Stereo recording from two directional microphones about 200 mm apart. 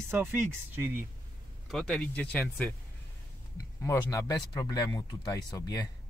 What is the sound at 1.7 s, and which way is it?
Speech, centre (ahead or behind).